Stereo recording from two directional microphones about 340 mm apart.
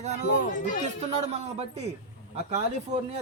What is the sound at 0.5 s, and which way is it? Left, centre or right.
Speech, left.